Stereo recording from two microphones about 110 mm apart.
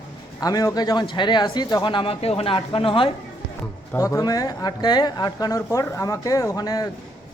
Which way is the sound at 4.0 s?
30° left (ahead or behind).